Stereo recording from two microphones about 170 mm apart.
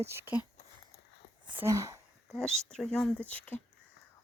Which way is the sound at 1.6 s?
20° right (ahead or behind).